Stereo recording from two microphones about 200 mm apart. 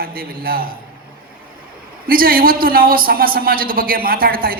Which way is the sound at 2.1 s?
45° right (ahead or behind).